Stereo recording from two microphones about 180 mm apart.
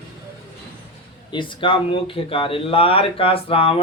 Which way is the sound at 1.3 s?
30° left (ahead or behind).